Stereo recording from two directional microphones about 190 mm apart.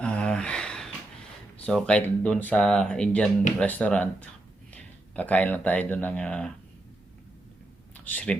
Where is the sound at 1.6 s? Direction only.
5° left (ahead or behind).